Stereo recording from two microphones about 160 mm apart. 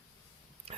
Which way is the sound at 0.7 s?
40° right (ahead or behind).